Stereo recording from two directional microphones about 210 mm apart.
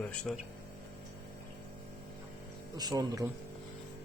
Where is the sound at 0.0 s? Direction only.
5° left (ahead or behind).